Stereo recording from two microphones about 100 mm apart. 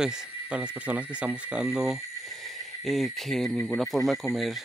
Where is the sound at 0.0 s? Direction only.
15° right (ahead or behind).